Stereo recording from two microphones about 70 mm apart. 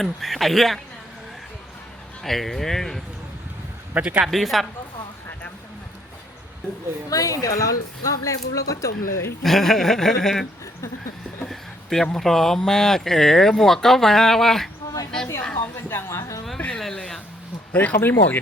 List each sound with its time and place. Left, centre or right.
0.0 s speech: centre
2.2 s speech: centre
3.9 s speech: centre
4.3 s speech: centre
7.1 s speech: left
9.4 s speech: centre
11.4 s a sound: centre
12.1 s speech: centre
15.6 s speech: left
16.0 s speech: left
16.6 s a sound: centre
17.7 s speech: left